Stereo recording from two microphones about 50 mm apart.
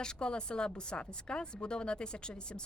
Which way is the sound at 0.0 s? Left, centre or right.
Centre.